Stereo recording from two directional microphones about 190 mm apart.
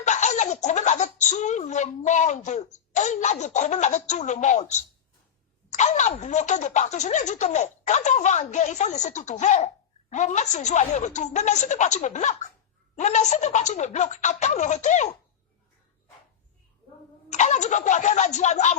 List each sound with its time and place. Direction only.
0.0 s speech: 40° left (ahead or behind)
17.3 s speech: 40° left (ahead or behind)